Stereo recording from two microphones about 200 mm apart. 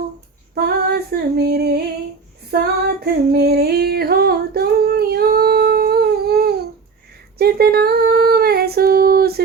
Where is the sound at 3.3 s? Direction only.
50° right (ahead or behind).